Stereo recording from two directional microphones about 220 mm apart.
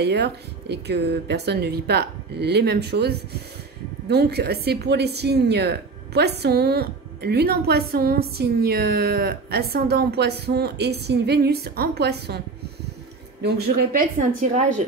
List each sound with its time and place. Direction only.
0.0 s a woman's voice: 50° right (ahead or behind)
13.4 s a woman's voice: 45° right (ahead or behind)